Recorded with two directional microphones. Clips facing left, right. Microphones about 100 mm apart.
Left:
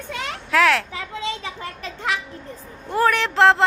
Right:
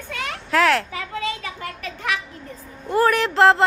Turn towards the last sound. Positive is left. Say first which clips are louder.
# right 1 dB
turn(degrees=0)  # may be behind; listen again after turning